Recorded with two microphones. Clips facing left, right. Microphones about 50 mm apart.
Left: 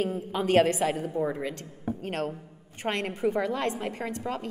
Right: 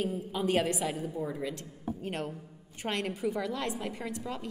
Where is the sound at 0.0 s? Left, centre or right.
Left.